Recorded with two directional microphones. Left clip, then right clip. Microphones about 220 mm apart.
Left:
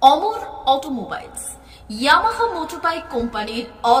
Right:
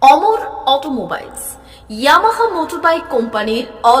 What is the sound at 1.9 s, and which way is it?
A woman's voice, 15° right (ahead or behind).